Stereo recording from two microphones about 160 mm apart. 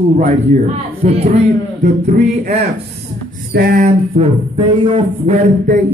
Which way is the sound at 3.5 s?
75° right (ahead or behind).